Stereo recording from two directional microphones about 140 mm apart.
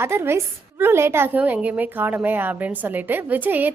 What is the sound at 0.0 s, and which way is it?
A woman's voice, 15° right (ahead or behind).